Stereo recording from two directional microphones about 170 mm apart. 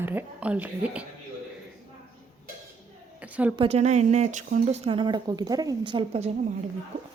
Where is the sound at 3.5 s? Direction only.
35° right (ahead or behind).